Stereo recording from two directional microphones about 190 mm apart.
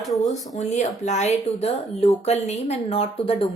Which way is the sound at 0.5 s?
35° left (ahead or behind).